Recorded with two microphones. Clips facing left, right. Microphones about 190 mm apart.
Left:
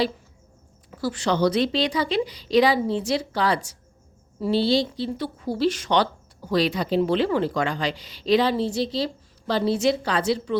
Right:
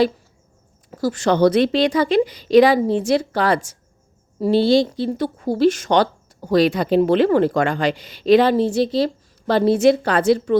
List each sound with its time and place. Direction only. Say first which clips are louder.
0.9 s speech: right 6 dB; 40° right (ahead or behind)